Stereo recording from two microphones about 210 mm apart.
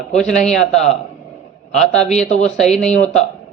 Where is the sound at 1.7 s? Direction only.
5° left (ahead or behind).